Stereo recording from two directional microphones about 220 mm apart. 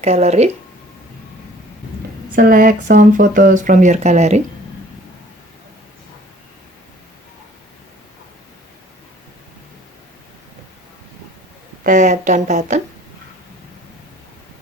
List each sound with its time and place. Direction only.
0.0 s speech: 30° right (ahead or behind)
2.3 s speech: 40° right (ahead or behind)
11.8 s speech: 35° right (ahead or behind)